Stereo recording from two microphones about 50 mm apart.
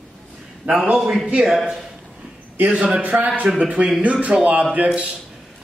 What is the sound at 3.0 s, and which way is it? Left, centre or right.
A man's voice, right.